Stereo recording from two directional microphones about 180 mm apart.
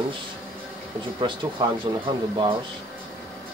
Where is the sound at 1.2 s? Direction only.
25° right (ahead or behind).